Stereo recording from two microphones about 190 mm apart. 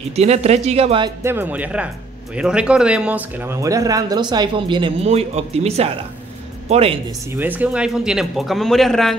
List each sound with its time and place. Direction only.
0.1 s speech: 35° right (ahead or behind)
1.2 s speech: 10° right (ahead or behind); by 7.0 s 30° right (ahead or behind)
7.1 s speech: 10° right (ahead or behind)